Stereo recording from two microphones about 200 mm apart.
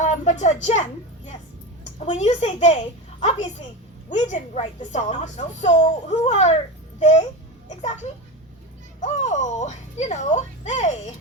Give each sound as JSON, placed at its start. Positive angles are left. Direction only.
{"t": 0.0, "sound": "a sound", "side_deg": 35}
{"t": 2.0, "sound": "a woman's voice", "side_deg": 35}
{"t": 9.0, "sound": "a woman's voice", "side_deg": 35}